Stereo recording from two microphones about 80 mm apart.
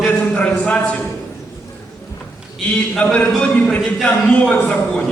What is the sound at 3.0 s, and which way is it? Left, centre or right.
Speech, centre.